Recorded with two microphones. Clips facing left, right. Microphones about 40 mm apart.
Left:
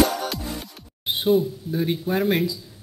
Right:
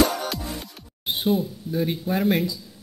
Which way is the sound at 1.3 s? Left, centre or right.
Centre.